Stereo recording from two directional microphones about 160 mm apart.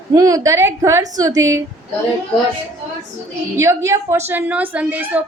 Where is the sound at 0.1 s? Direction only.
20° right (ahead or behind).